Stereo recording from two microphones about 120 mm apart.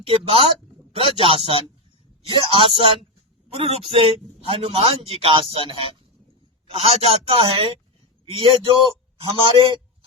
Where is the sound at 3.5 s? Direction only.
55° right (ahead or behind).